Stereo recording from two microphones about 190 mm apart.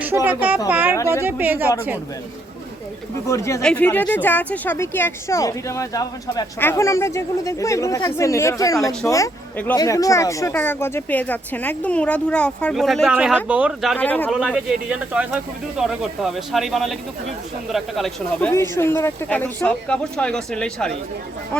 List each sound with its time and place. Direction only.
0.3 s a woman's voice: 10° right (ahead or behind)
0.7 s a sound: 10° right (ahead or behind)
1.2 s speech: 10° right (ahead or behind)
3.2 s speech: 15° left (ahead or behind); by 13.9 s 5° right (ahead or behind)
13.9 s speech: 10° left (ahead or behind)
14.3 s speech: 5° right (ahead or behind)